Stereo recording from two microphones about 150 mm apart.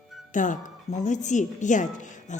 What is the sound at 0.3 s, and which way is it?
A woman's voice, 60° left (ahead or behind).